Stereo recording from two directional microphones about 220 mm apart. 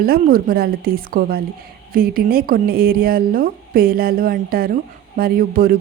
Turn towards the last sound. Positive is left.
turn(degrees=-40)  # may be behind; listen again after turning